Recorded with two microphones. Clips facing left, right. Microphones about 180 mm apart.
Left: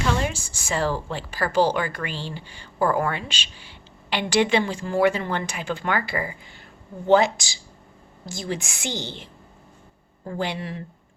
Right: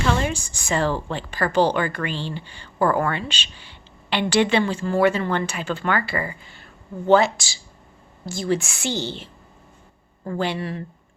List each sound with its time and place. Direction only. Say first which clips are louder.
0.0 s a woman's voice: right 2 dB; 5° left (ahead or behind)